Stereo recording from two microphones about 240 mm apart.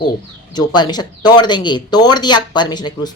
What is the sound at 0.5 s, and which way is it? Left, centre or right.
Speech, centre.